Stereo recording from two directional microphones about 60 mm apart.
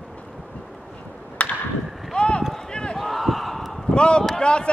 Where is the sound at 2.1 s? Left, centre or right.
Centre.